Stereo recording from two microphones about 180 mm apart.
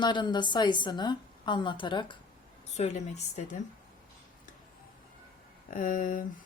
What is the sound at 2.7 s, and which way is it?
Speech, 40° left (ahead or behind).